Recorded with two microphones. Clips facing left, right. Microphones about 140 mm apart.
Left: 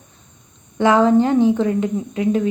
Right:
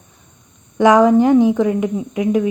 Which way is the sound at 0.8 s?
15° right (ahead or behind).